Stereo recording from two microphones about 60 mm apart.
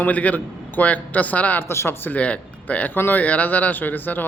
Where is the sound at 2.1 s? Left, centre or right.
Left.